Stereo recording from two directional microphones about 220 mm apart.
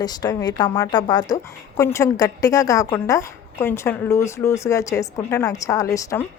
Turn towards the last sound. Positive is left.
turn(degrees=15)  # may be behind; listen again after turning